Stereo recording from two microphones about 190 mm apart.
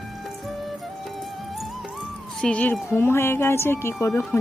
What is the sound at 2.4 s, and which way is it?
Speech, 5° left (ahead or behind).